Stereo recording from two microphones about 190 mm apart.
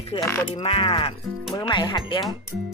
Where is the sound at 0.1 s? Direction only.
20° left (ahead or behind).